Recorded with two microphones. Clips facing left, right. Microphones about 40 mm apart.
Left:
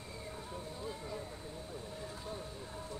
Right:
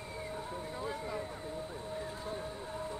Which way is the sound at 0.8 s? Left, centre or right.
Right.